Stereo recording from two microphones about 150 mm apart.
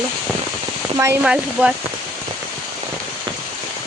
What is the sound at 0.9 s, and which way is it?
Speech, 20° right (ahead or behind).